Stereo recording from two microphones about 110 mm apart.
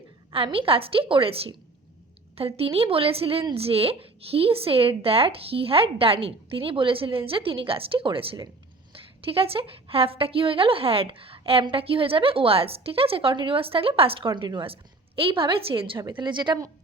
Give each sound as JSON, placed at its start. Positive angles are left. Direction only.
{"t": 0.3, "sound": "a woman's voice", "side_deg": -55}